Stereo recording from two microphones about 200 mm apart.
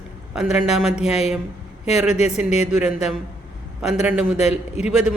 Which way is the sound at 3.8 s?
5° right (ahead or behind).